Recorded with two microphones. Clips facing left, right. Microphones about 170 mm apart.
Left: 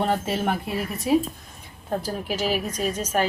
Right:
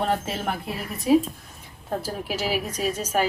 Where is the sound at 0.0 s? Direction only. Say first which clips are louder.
Left 2 dB; centre (ahead or behind).